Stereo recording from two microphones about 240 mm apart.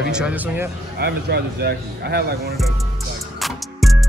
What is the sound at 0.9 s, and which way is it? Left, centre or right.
A man's voice, right.